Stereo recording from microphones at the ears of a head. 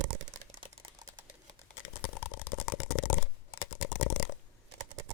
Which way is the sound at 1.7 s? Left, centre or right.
Left.